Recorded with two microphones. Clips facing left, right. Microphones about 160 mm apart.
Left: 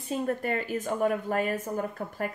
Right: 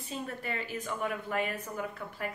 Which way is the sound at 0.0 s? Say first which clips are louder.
Left 9 dB; 45° left (ahead or behind).